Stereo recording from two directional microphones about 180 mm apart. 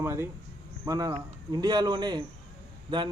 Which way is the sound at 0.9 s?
20° right (ahead or behind).